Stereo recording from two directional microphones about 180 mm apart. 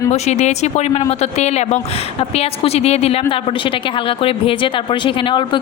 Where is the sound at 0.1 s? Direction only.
40° left (ahead or behind).